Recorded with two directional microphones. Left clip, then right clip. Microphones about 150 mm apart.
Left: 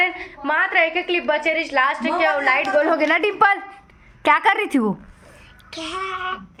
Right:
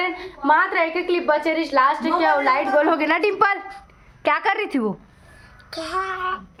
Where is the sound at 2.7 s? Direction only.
10° right (ahead or behind).